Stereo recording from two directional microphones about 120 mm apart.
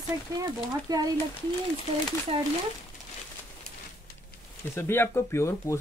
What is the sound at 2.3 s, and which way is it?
Speech, 50° right (ahead or behind).